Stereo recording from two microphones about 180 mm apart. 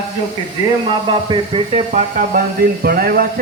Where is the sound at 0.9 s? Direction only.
30° right (ahead or behind).